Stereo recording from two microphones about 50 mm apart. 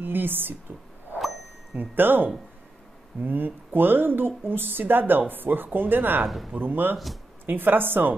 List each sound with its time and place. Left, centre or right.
0.0 s speech: right
1.8 s a woman's voice: right
6.2 s speech: centre
6.5 s a woman's voice: right